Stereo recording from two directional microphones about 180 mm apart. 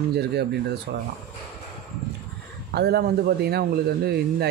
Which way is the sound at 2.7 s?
65° right (ahead or behind).